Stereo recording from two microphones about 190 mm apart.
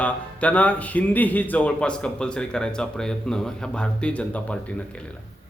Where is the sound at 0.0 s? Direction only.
5° left (ahead or behind).